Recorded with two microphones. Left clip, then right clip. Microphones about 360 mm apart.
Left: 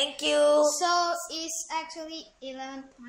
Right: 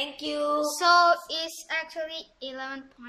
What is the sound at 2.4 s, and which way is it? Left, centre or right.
Child singing, right.